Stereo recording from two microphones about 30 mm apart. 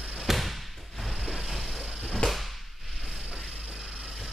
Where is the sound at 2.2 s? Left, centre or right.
Left.